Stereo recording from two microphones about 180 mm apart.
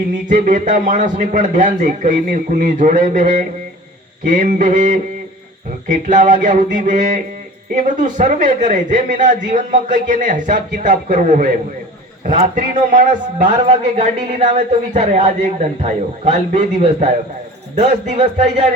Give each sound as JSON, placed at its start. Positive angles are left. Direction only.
{"t": 0.3, "sound": "a woman's voice", "side_deg": -45}